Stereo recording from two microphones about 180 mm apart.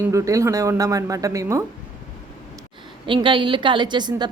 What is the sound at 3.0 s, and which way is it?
A woman's voice, 30° right (ahead or behind).